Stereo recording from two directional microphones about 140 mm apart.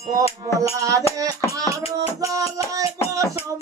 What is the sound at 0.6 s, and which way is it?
Music, 25° right (ahead or behind).